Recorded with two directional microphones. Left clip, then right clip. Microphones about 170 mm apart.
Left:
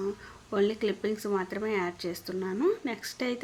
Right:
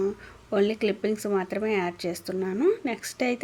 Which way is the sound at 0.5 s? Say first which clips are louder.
Right 3 dB; 20° right (ahead or behind).